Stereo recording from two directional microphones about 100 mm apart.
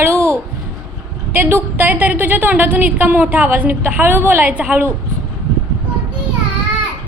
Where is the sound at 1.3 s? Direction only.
25° right (ahead or behind).